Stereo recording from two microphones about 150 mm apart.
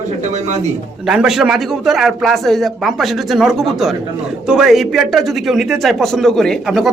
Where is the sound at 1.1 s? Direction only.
5° right (ahead or behind).